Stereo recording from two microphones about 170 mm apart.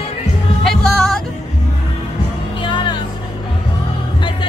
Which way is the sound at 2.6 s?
30° left (ahead or behind).